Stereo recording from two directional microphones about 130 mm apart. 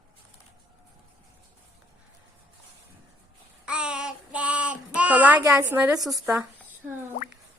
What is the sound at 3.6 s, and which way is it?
Child singing, 5° right (ahead or behind).